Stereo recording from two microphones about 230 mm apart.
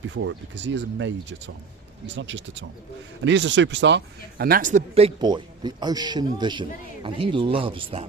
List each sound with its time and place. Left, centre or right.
0.1 s a man's voice: right